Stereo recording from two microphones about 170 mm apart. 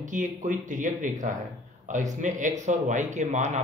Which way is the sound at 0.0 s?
45° right (ahead or behind).